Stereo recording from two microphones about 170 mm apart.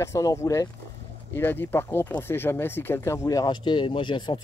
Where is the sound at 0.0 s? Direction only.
20° left (ahead or behind).